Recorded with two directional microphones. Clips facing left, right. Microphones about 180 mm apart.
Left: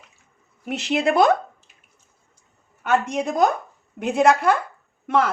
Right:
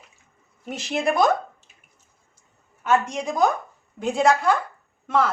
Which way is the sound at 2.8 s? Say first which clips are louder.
Left 1 dB; 60° left (ahead or behind).